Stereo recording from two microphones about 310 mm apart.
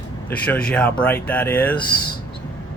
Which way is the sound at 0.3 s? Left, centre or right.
Centre.